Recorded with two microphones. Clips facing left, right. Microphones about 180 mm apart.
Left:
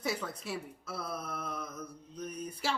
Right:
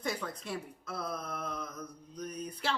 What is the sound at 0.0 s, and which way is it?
Speech, 5° left (ahead or behind).